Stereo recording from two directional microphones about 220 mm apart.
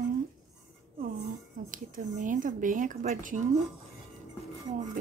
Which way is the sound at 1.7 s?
35° right (ahead or behind).